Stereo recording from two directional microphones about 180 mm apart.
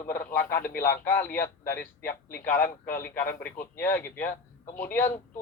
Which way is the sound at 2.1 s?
50° left (ahead or behind).